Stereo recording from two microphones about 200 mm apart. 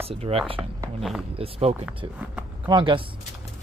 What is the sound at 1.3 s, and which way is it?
Speech, 30° right (ahead or behind).